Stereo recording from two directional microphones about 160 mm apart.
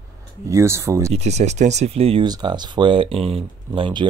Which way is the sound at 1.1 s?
45° right (ahead or behind).